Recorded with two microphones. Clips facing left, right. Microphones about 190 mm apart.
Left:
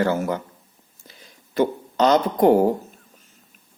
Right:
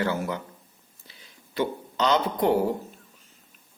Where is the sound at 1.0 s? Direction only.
45° left (ahead or behind).